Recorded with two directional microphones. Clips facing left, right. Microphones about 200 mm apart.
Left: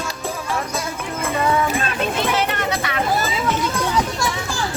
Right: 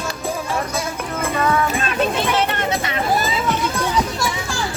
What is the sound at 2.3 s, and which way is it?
Children playing, 25° right (ahead or behind).